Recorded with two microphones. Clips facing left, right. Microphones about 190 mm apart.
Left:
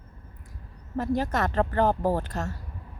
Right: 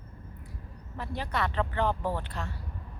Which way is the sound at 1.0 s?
45° left (ahead or behind).